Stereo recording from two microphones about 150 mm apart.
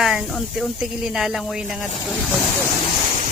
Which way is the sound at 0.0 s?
5° right (ahead or behind).